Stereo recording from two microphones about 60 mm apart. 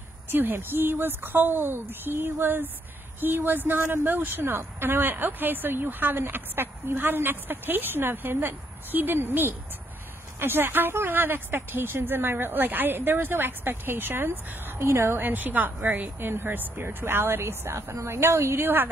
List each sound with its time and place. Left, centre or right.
0.3 s speech: right
14.8 s a woman's voice: right